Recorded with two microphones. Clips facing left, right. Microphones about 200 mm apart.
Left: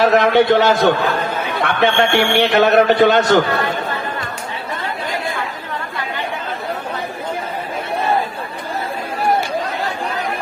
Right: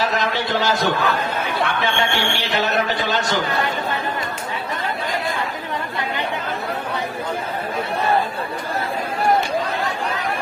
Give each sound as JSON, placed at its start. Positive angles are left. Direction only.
{"t": 0.0, "sound": "a man's voice", "side_deg": 60}